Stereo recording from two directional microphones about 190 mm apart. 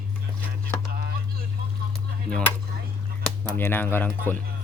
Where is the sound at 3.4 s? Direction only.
10° left (ahead or behind).